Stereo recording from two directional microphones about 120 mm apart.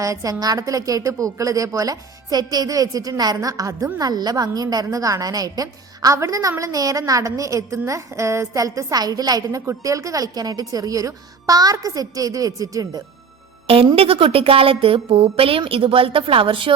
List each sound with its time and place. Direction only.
0.0 s a woman's voice: 25° right (ahead or behind)
13.9 s a woman's voice: 50° right (ahead or behind)